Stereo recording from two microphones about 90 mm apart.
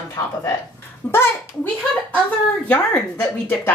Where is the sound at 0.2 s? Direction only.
30° left (ahead or behind).